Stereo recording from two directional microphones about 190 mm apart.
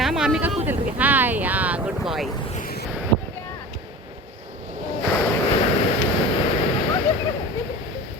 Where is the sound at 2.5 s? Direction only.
45° left (ahead or behind).